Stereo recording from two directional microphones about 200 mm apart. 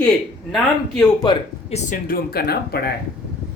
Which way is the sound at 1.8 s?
45° left (ahead or behind).